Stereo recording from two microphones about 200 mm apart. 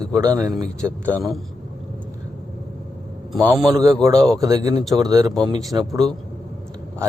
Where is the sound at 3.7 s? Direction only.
15° right (ahead or behind).